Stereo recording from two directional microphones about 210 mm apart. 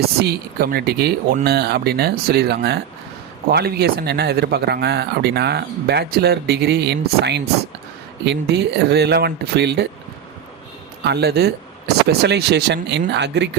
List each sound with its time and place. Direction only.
0.2 s speech: 45° right (ahead or behind)
11.0 s speech: 50° right (ahead or behind)